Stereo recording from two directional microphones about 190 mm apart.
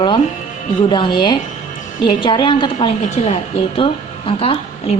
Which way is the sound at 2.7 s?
40° left (ahead or behind).